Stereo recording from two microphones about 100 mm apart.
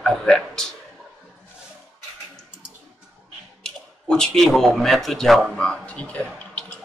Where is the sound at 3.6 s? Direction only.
5° left (ahead or behind).